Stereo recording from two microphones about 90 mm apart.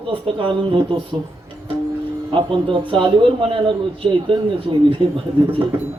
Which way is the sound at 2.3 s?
70° right (ahead or behind).